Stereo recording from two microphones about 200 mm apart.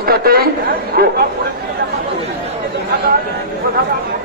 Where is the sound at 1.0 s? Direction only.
50° right (ahead or behind).